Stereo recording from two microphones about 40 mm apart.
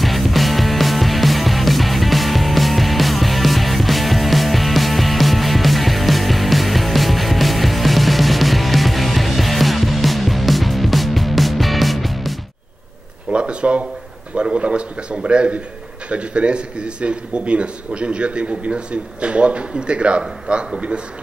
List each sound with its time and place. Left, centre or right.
0.0 s music: centre
13.3 s a sound: right
16.1 s a man's voice: right